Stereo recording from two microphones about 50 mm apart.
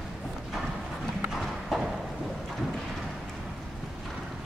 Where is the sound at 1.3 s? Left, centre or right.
Centre.